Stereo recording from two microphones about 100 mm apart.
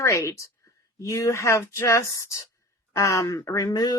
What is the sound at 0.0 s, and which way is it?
A woman's voice, 30° left (ahead or behind).